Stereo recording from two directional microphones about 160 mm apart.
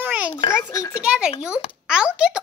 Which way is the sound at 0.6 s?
20° left (ahead or behind).